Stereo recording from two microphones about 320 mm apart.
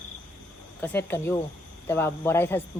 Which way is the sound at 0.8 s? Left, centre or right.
Centre.